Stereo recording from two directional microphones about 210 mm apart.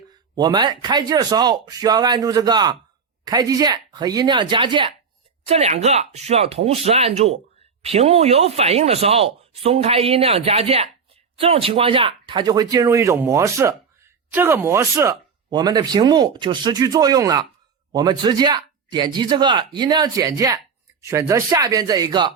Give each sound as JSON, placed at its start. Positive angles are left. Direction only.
{"t": 0.3, "sound": "speech", "side_deg": -20}